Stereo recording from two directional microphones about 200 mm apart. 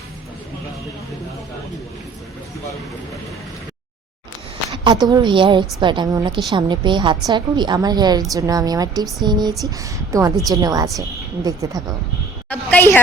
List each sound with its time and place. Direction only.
4.8 s a woman's voice: 20° right (ahead or behind)
12.5 s a woman's voice: 10° left (ahead or behind)